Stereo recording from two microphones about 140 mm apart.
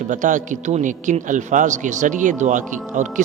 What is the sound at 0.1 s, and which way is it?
A man's voice, 65° right (ahead or behind).